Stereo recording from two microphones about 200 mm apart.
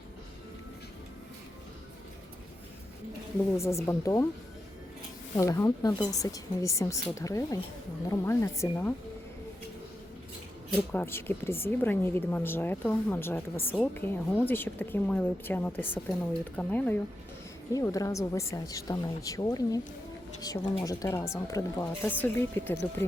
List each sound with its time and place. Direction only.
3.6 s a woman's voice: 15° left (ahead or behind)
5.4 s a woman's voice: 15° left (ahead or behind)
10.7 s a woman's voice: 10° left (ahead or behind)